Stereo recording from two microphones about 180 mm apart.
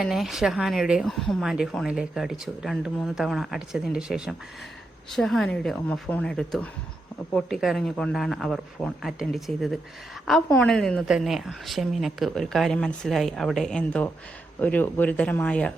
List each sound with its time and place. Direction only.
0.0 s speech: centre (ahead or behind)